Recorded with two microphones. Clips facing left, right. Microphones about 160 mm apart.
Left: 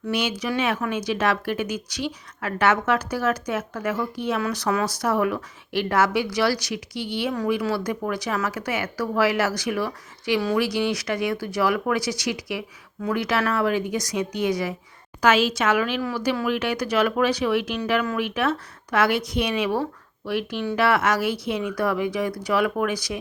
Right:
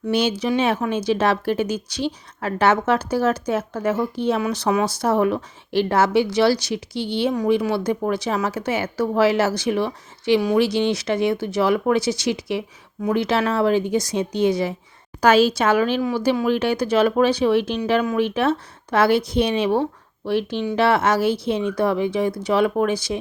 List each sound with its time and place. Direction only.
0.1 s speech: 30° right (ahead or behind)
16.0 s speech: 20° right (ahead or behind)